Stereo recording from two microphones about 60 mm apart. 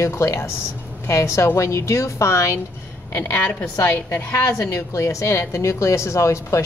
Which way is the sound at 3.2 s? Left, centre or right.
Left.